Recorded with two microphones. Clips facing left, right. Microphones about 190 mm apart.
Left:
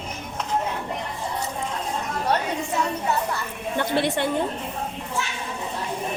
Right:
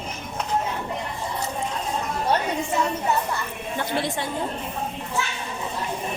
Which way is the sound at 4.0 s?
65° left (ahead or behind).